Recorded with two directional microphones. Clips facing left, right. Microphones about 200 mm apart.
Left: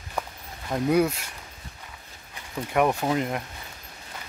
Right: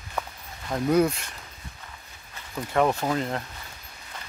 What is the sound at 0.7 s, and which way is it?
Speech, 10° left (ahead or behind).